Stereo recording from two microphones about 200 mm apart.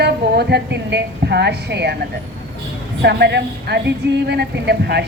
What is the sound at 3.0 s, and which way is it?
A woman's voice, 55° right (ahead or behind).